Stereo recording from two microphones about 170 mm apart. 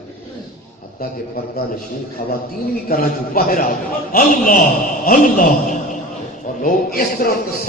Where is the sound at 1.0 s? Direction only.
60° left (ahead or behind).